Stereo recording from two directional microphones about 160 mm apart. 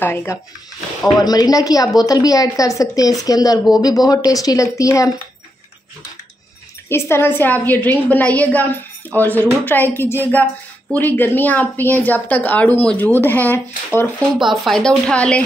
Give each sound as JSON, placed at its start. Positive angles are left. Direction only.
{"t": 0.0, "sound": "a woman's voice", "side_deg": 15}
{"t": 1.2, "sound": "speech", "side_deg": 25}
{"t": 6.9, "sound": "a woman's voice", "side_deg": 15}
{"t": 14.4, "sound": "speech", "side_deg": 0}